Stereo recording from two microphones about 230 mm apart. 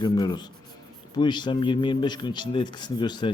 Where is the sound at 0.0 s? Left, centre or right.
Centre.